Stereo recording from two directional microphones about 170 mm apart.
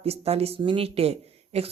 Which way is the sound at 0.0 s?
35° right (ahead or behind).